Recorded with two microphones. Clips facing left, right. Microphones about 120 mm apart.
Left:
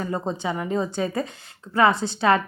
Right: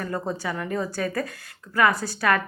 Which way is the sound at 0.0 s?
20° left (ahead or behind).